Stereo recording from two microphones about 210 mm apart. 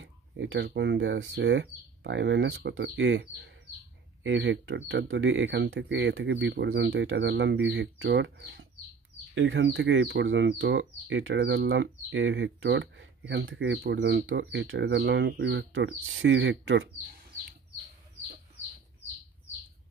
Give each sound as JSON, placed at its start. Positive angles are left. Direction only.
{"t": 0.0, "sound": "speech", "side_deg": -65}
{"t": 17.3, "sound": "chicken", "side_deg": 10}